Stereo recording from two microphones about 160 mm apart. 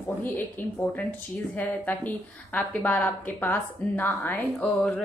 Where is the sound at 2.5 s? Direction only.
5° left (ahead or behind).